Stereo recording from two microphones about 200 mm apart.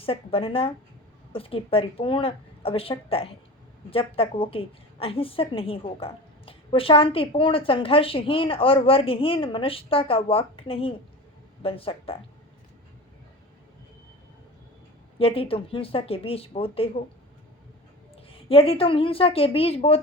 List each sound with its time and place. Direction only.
0.0 s a woman's voice: 30° left (ahead or behind)
15.2 s a woman's voice: 30° left (ahead or behind)
18.3 s a woman's voice: 30° left (ahead or behind)